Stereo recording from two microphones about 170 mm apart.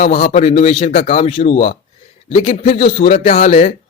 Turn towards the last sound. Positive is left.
turn(degrees=40)  # may be behind; listen again after turning